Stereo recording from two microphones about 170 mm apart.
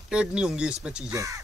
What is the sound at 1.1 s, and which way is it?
Speech, 20° right (ahead or behind).